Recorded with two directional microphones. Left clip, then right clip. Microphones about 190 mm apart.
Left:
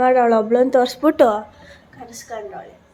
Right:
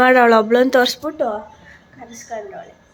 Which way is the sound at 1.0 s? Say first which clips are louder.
Left 7 dB; 50° left (ahead or behind).